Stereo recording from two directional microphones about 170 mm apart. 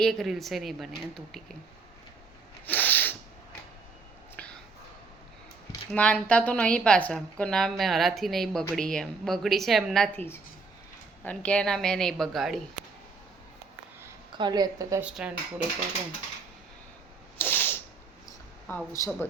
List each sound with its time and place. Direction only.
0.0 s a woman's voice: centre (ahead or behind)
2.6 s sneeze: 10° left (ahead or behind)
4.4 s a sound: 5° left (ahead or behind)
5.9 s a woman's voice: 5° left (ahead or behind)
11.2 s a woman's voice: 10° left (ahead or behind)
14.3 s a woman's voice: 25° right (ahead or behind)
15.0 s speech: 5° right (ahead or behind)
17.3 s a sound: 10° left (ahead or behind)
18.9 s speech: 15° left (ahead or behind)